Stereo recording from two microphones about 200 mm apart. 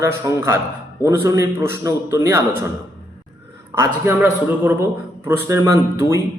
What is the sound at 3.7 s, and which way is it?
A man's voice, 10° right (ahead or behind).